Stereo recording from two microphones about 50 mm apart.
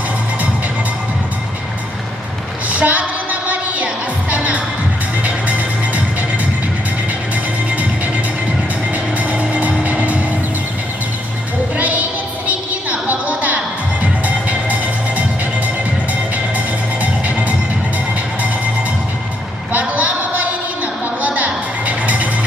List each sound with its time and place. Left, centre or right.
2.7 s music: right
9.2 s music: right
11.7 s music: right
19.7 s a sound: right
20.8 s music: right